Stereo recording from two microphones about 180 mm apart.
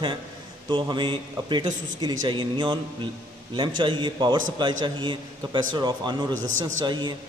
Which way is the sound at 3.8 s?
25° right (ahead or behind).